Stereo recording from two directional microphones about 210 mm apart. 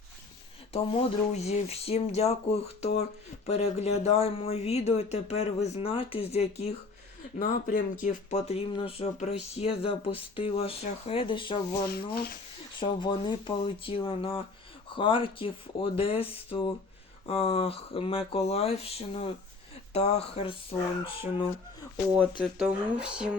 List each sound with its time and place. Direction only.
0.7 s speech: 25° left (ahead or behind)
7.3 s speech: 40° left (ahead or behind); by 11.6 s 25° left (ahead or behind)
11.9 s speech: 50° left (ahead or behind)
12.8 s speech: 25° left (ahead or behind)
22.2 s speech: 5° right (ahead or behind)